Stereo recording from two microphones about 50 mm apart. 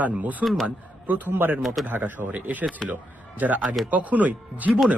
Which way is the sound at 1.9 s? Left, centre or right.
Right.